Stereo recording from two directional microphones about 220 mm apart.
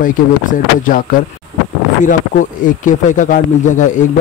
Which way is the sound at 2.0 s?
35° left (ahead or behind).